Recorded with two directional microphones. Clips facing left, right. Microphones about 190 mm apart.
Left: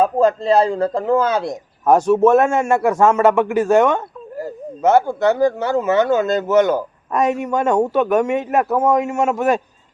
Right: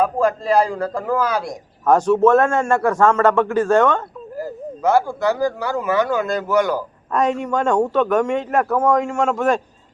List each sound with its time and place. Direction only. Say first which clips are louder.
0.0 s speech: left 3 dB; 25° left (ahead or behind)
1.9 s a man's voice: left 1 dB; 10° left (ahead or behind)
4.4 s speech: left 1 dB; 25° left (ahead or behind)
7.1 s a man's voice: left 1 dB; 10° left (ahead or behind)